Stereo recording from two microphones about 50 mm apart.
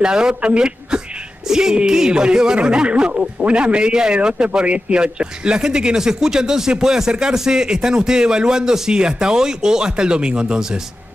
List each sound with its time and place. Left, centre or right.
0.0 s speech: centre